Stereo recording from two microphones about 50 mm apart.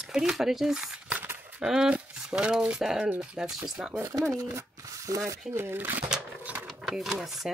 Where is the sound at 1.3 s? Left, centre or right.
Right.